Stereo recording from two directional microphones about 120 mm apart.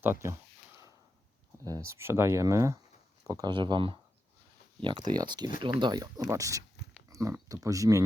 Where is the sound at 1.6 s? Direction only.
25° right (ahead or behind).